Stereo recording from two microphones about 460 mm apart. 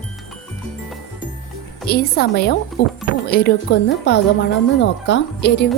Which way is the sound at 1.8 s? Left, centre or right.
Centre.